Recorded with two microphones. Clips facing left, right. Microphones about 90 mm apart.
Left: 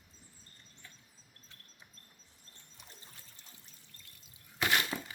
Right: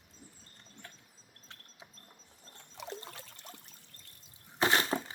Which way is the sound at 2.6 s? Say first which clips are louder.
Right 16 dB; 90° right.